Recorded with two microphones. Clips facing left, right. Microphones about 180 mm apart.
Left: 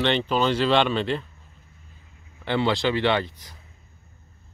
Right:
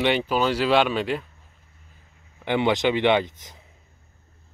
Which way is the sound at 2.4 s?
15° right (ahead or behind).